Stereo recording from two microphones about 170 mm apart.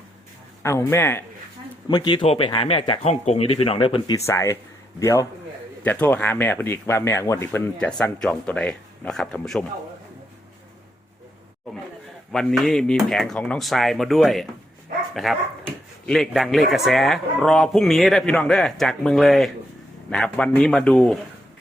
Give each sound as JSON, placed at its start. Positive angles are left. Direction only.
{"t": 0.6, "sound": "speech", "side_deg": 15}
{"t": 1.9, "sound": "speech", "side_deg": 25}
{"t": 4.3, "sound": "speech", "side_deg": 15}
{"t": 12.3, "sound": "speech", "side_deg": 5}